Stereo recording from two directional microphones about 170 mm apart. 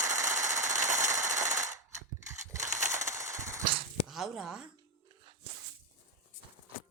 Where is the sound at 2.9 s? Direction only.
20° right (ahead or behind).